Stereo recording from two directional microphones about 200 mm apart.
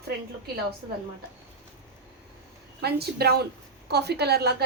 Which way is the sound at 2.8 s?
55° right (ahead or behind).